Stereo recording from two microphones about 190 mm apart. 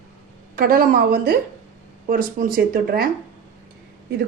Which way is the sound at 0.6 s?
50° right (ahead or behind).